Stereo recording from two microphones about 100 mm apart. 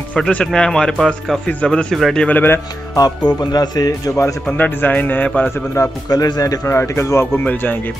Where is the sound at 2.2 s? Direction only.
20° left (ahead or behind).